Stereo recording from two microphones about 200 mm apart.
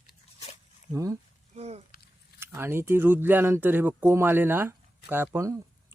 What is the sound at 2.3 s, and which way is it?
Speech, 10° right (ahead or behind).